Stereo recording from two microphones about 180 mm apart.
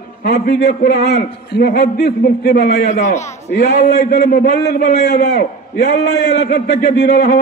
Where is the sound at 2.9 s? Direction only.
40° left (ahead or behind).